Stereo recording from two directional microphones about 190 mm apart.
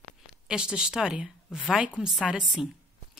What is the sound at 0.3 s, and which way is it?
A woman's voice, 5° right (ahead or behind).